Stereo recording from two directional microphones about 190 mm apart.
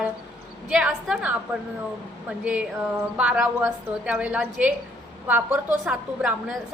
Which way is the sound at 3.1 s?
5° right (ahead or behind).